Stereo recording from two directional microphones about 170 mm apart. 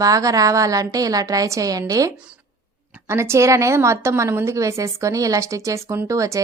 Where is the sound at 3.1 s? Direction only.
15° right (ahead or behind).